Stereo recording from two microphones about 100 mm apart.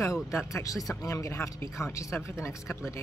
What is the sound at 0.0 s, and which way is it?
Speech, 30° left (ahead or behind).